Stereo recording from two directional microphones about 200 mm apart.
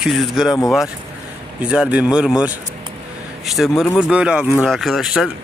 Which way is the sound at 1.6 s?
5° right (ahead or behind).